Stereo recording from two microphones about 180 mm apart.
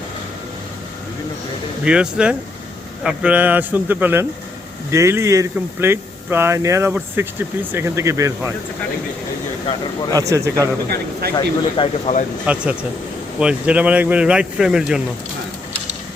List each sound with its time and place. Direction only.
1.8 s speech: 5° right (ahead or behind)
10.1 s speech: 20° right (ahead or behind)
10.8 s a man's voice: 60° right (ahead or behind)
11.3 s speech: 30° left (ahead or behind)
12.5 s speech: 5° right (ahead or behind)